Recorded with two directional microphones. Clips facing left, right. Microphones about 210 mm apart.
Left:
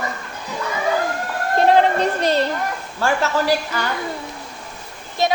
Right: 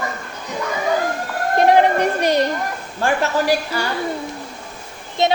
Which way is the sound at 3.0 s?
15° right (ahead or behind).